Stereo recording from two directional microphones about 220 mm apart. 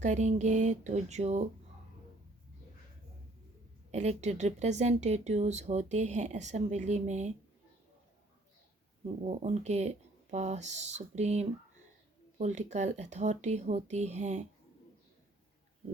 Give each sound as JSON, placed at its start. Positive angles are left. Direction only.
{"t": 0.0, "sound": "speech", "side_deg": -30}
{"t": 3.9, "sound": "speech", "side_deg": -30}
{"t": 9.2, "sound": "speech", "side_deg": -30}